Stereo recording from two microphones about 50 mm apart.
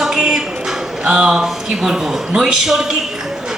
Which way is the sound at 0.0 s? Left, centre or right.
Centre.